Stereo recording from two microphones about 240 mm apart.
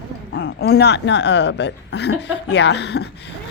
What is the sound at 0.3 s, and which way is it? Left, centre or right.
A woman's voice, left.